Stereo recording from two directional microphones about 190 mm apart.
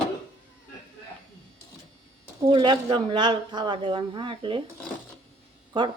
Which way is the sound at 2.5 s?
25° right (ahead or behind).